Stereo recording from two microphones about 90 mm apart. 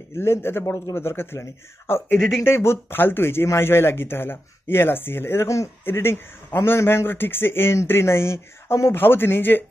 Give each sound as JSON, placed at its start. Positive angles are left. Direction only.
{"t": 0.2, "sound": "speech", "side_deg": 30}
{"t": 2.1, "sound": "speech", "side_deg": 0}
{"t": 2.4, "sound": "speech", "side_deg": 30}